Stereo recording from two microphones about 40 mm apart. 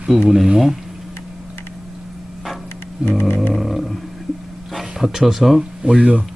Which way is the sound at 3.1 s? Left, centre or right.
Left.